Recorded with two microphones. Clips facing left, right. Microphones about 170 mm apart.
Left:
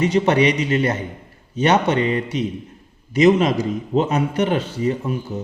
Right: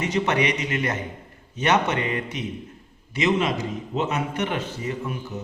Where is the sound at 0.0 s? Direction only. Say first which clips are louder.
Left 7 dB; 30° left (ahead or behind).